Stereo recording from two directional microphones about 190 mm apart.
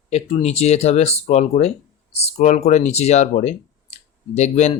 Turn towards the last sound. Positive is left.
turn(degrees=35)  # may be behind; listen again after turning